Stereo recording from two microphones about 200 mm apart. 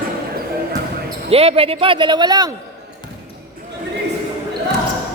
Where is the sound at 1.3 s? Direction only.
30° right (ahead or behind).